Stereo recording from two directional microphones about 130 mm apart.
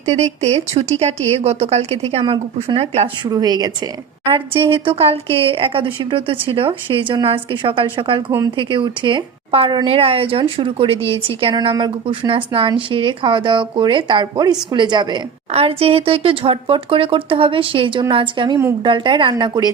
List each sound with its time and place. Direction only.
0.0 s a woman's voice: 55° right (ahead or behind)
3.2 s a woman's voice: 30° right (ahead or behind)
4.3 s a woman's voice: 40° right (ahead or behind)
15.5 s a woman's voice: 50° right (ahead or behind); by 19.7 s 30° right (ahead or behind)